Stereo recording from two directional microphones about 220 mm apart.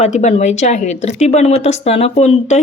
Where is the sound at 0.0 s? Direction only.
30° left (ahead or behind).